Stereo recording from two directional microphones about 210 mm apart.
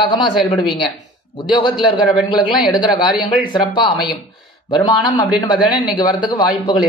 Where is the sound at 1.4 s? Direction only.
20° left (ahead or behind).